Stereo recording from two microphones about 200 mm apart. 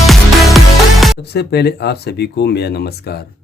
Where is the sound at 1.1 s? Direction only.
55° left (ahead or behind).